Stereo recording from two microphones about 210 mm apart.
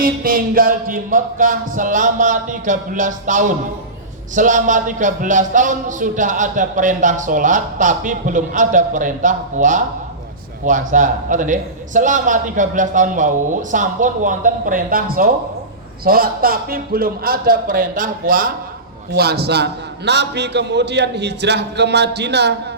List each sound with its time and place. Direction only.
0.0 s a man's voice: 45° right (ahead or behind)